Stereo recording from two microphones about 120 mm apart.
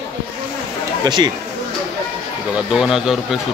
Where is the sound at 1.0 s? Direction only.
35° right (ahead or behind).